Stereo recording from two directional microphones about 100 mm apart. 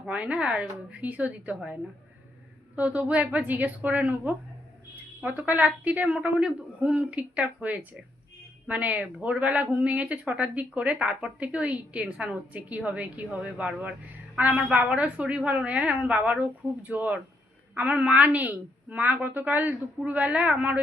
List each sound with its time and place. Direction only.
0.0 s a woman's voice: 15° right (ahead or behind)
2.7 s a woman's voice: 15° right (ahead or behind)